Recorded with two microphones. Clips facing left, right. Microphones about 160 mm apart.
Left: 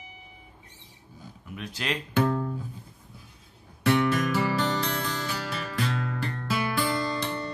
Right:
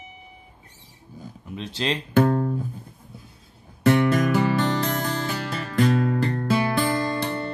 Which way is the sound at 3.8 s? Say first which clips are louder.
Right 5 dB; 45° right (ahead or behind).